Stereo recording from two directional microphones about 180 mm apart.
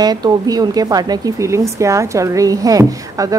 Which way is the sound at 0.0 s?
20° right (ahead or behind).